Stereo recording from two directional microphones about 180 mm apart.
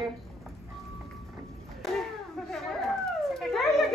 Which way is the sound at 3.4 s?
Centre (ahead or behind).